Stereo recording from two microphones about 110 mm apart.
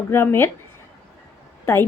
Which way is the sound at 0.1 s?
25° left (ahead or behind).